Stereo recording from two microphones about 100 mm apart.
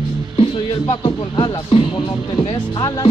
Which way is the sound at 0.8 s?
50° left (ahead or behind).